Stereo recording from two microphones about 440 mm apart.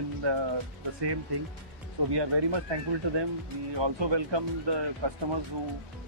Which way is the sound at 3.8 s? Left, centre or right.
Right.